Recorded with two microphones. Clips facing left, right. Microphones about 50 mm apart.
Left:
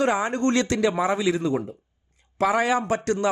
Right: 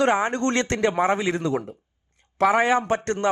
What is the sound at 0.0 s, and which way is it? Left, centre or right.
Speech, right.